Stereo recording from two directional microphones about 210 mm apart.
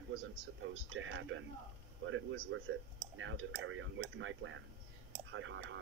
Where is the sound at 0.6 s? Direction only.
65° right (ahead or behind).